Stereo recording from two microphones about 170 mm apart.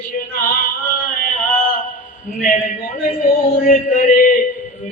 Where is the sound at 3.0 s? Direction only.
55° left (ahead or behind).